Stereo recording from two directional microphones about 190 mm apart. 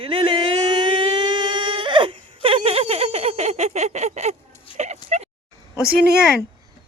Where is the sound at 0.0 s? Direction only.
30° right (ahead or behind).